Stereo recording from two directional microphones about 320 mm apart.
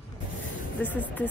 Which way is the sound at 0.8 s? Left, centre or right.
Centre.